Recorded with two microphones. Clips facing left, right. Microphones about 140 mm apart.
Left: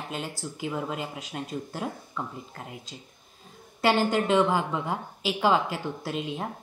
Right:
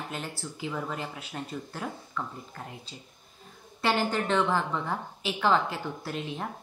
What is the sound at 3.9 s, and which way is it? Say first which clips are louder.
A woman's voice: left 4 dB; 15° left (ahead or behind).